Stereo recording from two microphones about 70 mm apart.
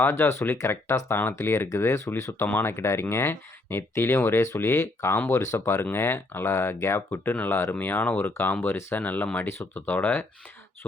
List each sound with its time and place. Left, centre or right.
0.1 s speech: left
7.3 s speech: left
9.0 s speech: left